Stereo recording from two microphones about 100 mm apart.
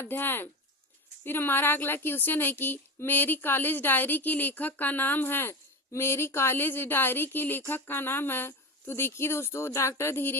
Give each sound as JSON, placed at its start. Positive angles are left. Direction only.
{"t": 0.0, "sound": "speech", "side_deg": 20}